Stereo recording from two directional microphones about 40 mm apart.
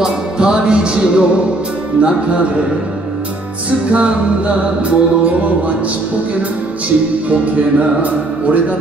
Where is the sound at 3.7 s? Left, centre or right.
Right.